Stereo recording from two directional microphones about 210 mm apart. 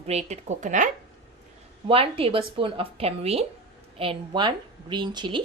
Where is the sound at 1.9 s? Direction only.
25° right (ahead or behind).